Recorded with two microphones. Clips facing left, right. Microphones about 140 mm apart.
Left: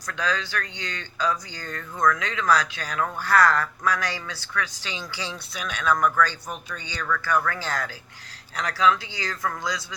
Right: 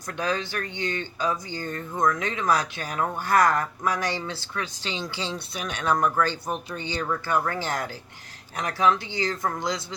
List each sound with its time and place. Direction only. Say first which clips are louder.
0.1 s speech: even; 20° right (ahead or behind)